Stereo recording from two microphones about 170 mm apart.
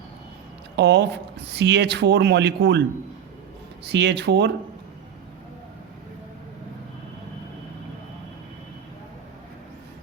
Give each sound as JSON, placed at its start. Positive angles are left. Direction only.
{"t": 0.8, "sound": "speech", "side_deg": -85}
{"t": 3.8, "sound": "speech", "side_deg": -90}